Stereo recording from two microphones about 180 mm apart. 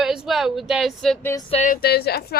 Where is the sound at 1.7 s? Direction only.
60° left (ahead or behind).